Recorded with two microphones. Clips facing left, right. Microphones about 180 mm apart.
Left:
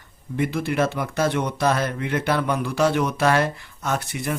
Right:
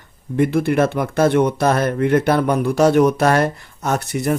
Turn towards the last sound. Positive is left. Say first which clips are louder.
# right 6 dB
turn(degrees=-45)  # may be behind; listen again after turning